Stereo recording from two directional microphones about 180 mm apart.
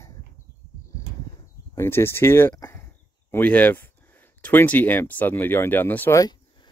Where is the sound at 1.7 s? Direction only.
15° left (ahead or behind).